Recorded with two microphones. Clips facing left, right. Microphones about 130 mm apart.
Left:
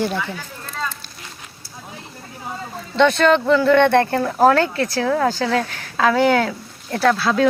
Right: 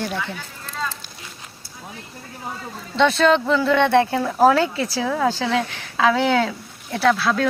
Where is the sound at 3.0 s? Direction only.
Centre (ahead or behind).